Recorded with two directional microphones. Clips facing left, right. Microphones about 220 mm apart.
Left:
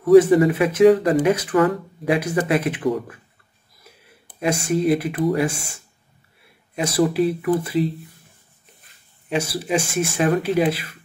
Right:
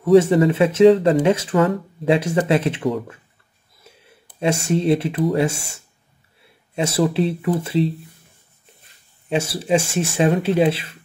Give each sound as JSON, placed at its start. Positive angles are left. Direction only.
{"t": 0.0, "sound": "speech", "side_deg": -25}
{"t": 3.9, "sound": "a sound", "side_deg": -25}
{"t": 4.4, "sound": "speech", "side_deg": -25}
{"t": 9.3, "sound": "speech", "side_deg": -25}